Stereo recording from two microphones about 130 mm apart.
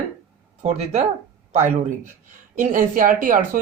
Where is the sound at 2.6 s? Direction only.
90° right.